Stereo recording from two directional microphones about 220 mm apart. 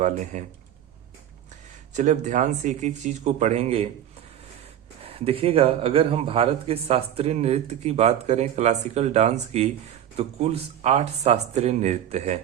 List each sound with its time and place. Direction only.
0.3 s speech: 35° right (ahead or behind)
1.9 s speech: 35° right (ahead or behind)
5.0 s a man's voice: 25° right (ahead or behind)